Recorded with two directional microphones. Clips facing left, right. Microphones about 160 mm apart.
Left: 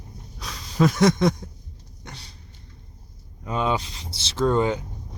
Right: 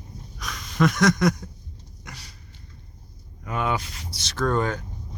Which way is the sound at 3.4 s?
25° left (ahead or behind).